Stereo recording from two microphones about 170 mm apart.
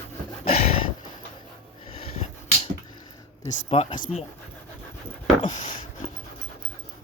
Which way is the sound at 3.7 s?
35° left (ahead or behind).